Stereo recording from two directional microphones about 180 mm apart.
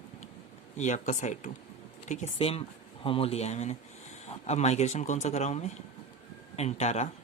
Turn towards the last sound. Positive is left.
turn(degrees=40)  # may be behind; listen again after turning